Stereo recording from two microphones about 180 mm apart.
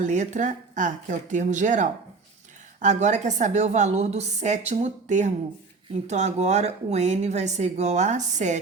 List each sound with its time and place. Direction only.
0.0 s a woman's voice: 45° right (ahead or behind)